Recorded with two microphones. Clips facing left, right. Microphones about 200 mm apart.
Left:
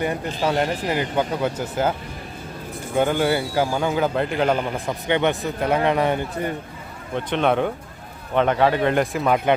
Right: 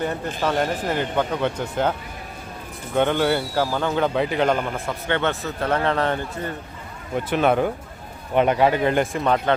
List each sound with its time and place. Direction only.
0.4 s a man's voice: 10° left (ahead or behind)
4.9 s a man's voice: 15° left (ahead or behind)
7.2 s speech: 5° right (ahead or behind)